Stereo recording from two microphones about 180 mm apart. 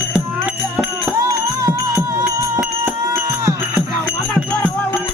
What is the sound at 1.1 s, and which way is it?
Music, 20° right (ahead or behind).